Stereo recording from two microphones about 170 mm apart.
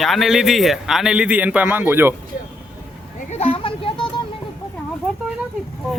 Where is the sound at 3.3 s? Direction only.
35° left (ahead or behind).